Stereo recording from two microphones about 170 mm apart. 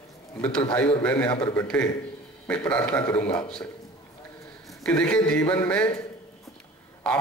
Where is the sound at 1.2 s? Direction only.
30° left (ahead or behind).